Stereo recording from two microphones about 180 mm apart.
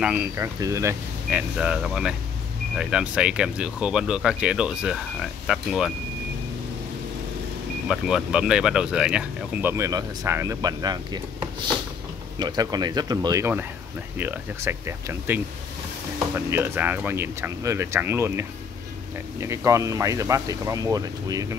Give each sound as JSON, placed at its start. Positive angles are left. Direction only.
{"t": 0.0, "sound": "speech", "side_deg": -10}
{"t": 1.6, "sound": "speech", "side_deg": -5}
{"t": 7.9, "sound": "speech", "side_deg": -5}
{"t": 12.4, "sound": "speech", "side_deg": -20}